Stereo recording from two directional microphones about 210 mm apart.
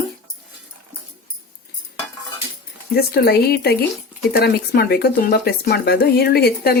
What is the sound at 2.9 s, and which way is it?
Speech, 50° left (ahead or behind).